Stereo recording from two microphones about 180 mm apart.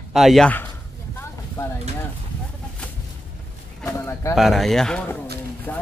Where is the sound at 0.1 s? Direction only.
Centre (ahead or behind).